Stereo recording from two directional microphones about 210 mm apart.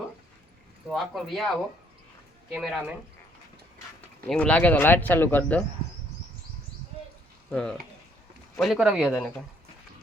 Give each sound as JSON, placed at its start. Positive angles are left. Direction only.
{"t": 0.9, "sound": "speech", "side_deg": 0}
{"t": 4.3, "sound": "speech", "side_deg": 5}
{"t": 7.5, "sound": "speech", "side_deg": 5}